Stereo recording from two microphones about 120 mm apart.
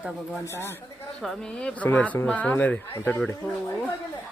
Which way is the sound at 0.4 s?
20° left (ahead or behind).